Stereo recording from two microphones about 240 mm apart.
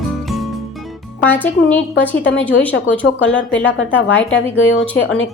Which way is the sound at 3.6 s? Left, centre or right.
Left.